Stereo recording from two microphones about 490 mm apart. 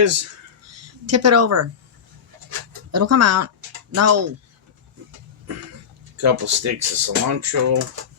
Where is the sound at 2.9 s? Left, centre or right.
Right.